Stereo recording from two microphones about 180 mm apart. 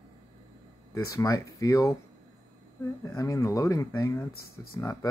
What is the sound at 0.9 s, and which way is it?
Speech, 20° left (ahead or behind).